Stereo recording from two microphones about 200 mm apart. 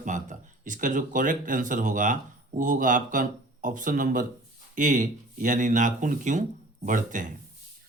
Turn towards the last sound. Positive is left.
turn(degrees=-40)  # may be behind; listen again after turning